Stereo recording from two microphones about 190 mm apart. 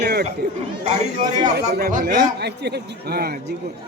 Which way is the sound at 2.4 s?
60° right (ahead or behind).